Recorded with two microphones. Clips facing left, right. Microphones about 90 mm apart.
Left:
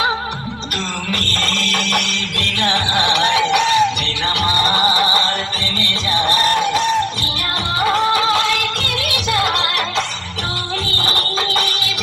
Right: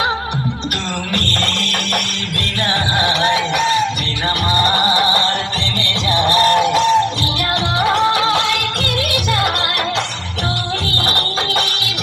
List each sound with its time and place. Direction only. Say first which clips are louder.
1.1 s music: right 2 dB; 55° right (ahead or behind); by 3.8 s 40° right (ahead or behind)
5.8 s music: right 2 dB; 85° right
7.8 s music: even; 70° right (ahead or behind); by 9.5 s 50° right (ahead or behind)
11.0 s music: right 1 dB; 65° right (ahead or behind)